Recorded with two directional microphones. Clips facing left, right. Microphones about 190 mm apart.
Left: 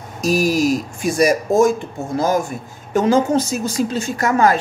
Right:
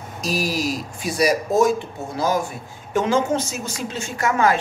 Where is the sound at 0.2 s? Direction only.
45° left (ahead or behind).